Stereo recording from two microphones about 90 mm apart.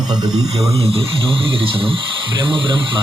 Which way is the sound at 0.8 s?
90° right.